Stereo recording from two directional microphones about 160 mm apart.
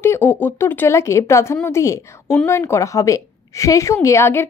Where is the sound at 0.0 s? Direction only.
15° left (ahead or behind).